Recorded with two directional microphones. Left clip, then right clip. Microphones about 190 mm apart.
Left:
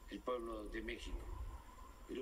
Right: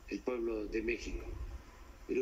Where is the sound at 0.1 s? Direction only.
30° right (ahead or behind).